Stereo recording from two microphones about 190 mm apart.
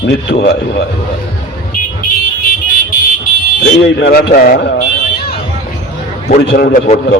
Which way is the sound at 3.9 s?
60° left (ahead or behind).